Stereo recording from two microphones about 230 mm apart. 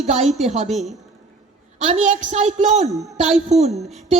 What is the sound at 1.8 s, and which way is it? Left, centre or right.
A woman's voice, right.